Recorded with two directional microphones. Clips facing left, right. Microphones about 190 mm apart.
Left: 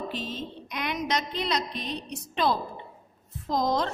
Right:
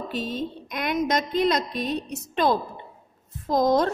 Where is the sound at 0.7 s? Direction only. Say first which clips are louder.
Right 5 dB; 50° right (ahead or behind).